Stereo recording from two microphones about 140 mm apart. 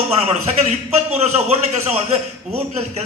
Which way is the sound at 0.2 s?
50° right (ahead or behind).